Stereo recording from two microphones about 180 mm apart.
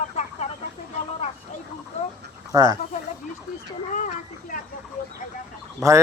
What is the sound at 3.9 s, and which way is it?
Speech, 40° left (ahead or behind).